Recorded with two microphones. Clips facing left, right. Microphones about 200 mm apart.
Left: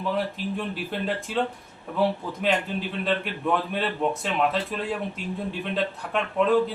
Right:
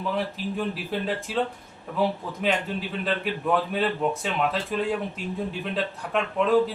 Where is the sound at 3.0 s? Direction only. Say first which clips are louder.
Left 1 dB; centre (ahead or behind).